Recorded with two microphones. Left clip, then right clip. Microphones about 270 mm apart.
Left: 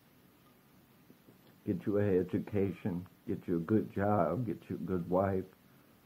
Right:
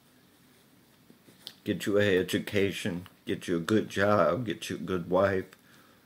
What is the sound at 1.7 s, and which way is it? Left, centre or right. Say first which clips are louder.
Speech: right 6 dB; right.